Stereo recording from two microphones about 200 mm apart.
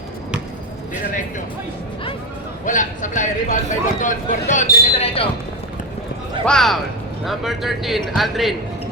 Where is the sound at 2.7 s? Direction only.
40° left (ahead or behind).